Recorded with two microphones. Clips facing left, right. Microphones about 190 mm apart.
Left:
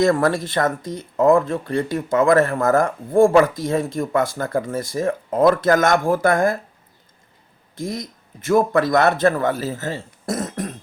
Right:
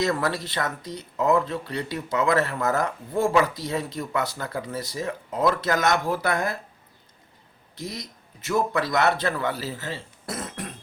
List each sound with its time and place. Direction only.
0.0 s speech: 50° left (ahead or behind)
7.8 s speech: 50° left (ahead or behind)